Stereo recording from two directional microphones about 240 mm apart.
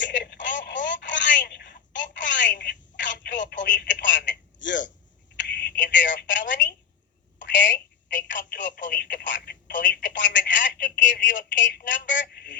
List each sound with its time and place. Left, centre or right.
0.0 s telephone: left
4.3 s a sound: left
5.4 s telephone: left